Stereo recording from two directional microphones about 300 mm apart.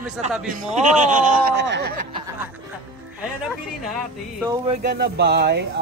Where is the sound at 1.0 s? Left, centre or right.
Right.